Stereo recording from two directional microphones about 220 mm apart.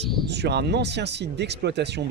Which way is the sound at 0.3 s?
50° right (ahead or behind).